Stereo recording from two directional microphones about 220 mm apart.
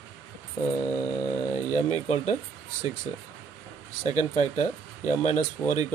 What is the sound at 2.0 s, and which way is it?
Speech, 30° left (ahead or behind).